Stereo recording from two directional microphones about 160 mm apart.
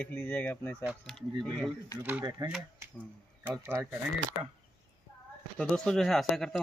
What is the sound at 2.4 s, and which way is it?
Speech, 20° right (ahead or behind).